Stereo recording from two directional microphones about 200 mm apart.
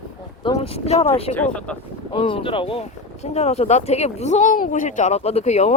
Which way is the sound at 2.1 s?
25° left (ahead or behind).